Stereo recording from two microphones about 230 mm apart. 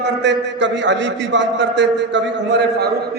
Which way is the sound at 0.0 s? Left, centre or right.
Right.